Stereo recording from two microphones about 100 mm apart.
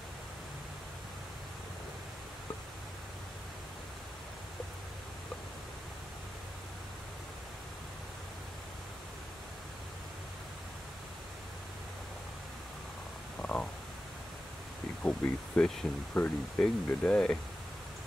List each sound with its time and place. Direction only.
13.4 s stomach rumble: 15° left (ahead or behind)
15.0 s speech: 15° left (ahead or behind)